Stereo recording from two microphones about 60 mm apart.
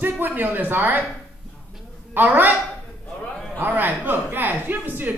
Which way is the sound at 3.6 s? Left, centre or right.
Right.